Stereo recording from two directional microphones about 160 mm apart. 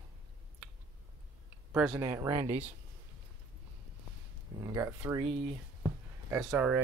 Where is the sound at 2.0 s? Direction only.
20° right (ahead or behind).